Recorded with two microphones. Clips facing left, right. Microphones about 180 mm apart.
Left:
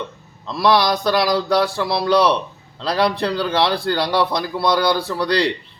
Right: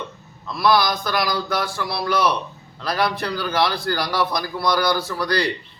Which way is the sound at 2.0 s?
30° left (ahead or behind).